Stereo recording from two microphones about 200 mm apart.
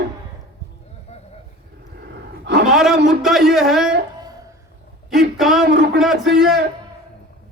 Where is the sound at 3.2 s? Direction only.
Centre (ahead or behind).